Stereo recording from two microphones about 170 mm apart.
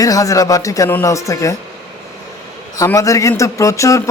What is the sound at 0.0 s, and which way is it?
Speech, 20° left (ahead or behind).